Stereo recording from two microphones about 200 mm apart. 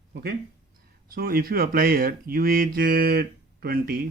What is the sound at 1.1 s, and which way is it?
Speech, 50° right (ahead or behind).